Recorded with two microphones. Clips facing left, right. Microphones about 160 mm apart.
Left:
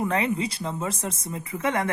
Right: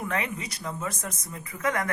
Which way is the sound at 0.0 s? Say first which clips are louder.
Left 6 dB; 30° left (ahead or behind).